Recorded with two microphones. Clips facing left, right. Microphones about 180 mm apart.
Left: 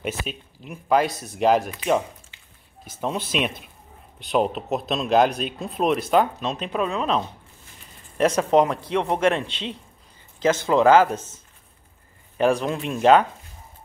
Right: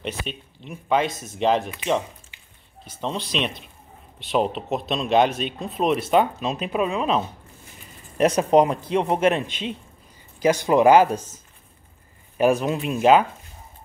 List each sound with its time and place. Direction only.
0.0 s speech: 5° left (ahead or behind)
3.0 s speech: 5° left (ahead or behind)
8.5 s speech: 10° right (ahead or behind)
12.4 s speech: 10° right (ahead or behind)